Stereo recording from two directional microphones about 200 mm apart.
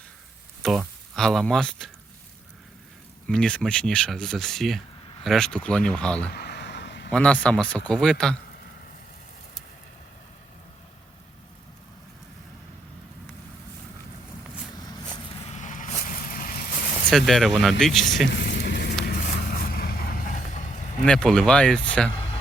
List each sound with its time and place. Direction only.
0.6 s speech: centre (ahead or behind)
3.2 s speech: 5° left (ahead or behind)
6.3 s a sound: 55° left (ahead or behind)
7.1 s speech: 5° left (ahead or behind)
15.4 s vehicle: 35° left (ahead or behind)
17.1 s speech: centre (ahead or behind)
18.3 s a sound: 60° left (ahead or behind)
19.0 s vehicle: 50° left (ahead or behind)
21.0 s speech: 5° left (ahead or behind)
22.1 s a sound: 30° left (ahead or behind)